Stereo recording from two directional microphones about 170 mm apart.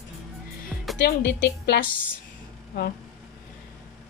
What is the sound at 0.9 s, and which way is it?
Speech, 70° left (ahead or behind).